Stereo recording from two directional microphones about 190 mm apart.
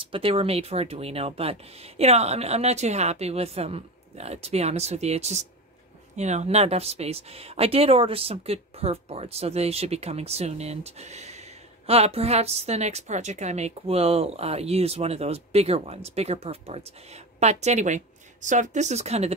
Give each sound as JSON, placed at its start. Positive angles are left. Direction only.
{"t": 0.0, "sound": "speech", "side_deg": -30}